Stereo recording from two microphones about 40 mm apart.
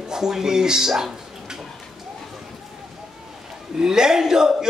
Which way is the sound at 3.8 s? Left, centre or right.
Centre.